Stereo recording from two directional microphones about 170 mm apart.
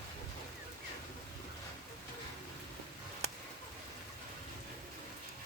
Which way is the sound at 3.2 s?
40° right (ahead or behind).